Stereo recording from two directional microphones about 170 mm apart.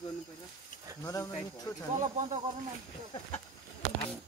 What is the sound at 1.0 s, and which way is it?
Speech, 20° left (ahead or behind).